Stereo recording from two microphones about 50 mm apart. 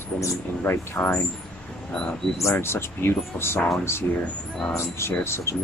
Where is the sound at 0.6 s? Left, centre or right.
Left.